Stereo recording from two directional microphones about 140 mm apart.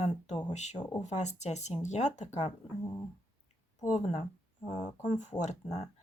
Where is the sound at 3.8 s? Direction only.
55° left (ahead or behind).